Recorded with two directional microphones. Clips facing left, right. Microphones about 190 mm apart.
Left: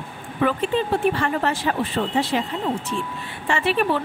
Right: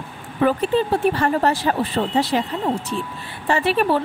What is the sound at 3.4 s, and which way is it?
Speech, 40° right (ahead or behind).